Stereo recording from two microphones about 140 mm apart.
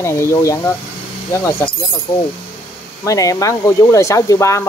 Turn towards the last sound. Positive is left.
turn(degrees=20)  # may be behind; listen again after turning